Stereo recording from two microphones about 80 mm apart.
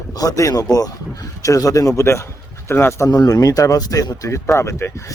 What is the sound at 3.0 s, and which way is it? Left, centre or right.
Speech, left.